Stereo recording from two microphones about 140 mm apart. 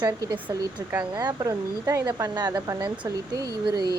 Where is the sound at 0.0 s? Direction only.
30° right (ahead or behind).